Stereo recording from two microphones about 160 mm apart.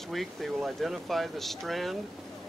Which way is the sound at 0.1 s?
Centre (ahead or behind).